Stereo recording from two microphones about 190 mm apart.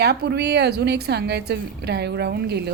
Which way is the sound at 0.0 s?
60° right (ahead or behind).